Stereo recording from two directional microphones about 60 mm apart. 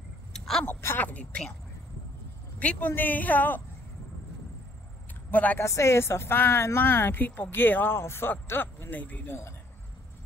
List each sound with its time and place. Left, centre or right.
0.3 s a sound: centre
0.7 s a sound: left
1.0 s speech: left
2.8 s speech: left
5.3 s speech: left
5.6 s speech: left